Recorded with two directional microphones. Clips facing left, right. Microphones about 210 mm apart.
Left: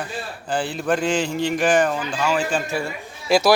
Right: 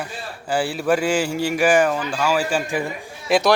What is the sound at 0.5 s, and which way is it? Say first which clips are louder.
A man's voice: right 2 dB; 10° right (ahead or behind).